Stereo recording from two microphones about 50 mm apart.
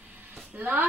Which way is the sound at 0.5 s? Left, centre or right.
Right.